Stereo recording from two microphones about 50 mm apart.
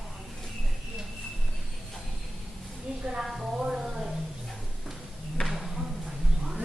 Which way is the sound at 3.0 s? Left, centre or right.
Right.